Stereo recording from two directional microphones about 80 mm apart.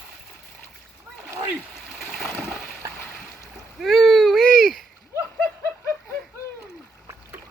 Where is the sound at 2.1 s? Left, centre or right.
Centre.